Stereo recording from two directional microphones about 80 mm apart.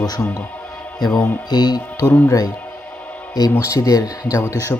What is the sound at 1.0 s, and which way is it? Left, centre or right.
Speech, left.